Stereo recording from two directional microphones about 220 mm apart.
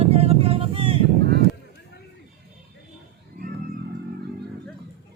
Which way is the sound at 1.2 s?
45° right (ahead or behind).